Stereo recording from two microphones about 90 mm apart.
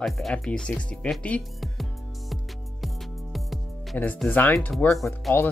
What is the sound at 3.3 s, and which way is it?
Music, centre (ahead or behind).